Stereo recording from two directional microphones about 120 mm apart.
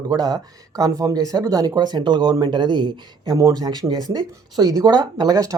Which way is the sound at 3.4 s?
30° right (ahead or behind).